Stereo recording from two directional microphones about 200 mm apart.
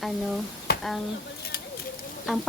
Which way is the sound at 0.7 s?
50° left (ahead or behind).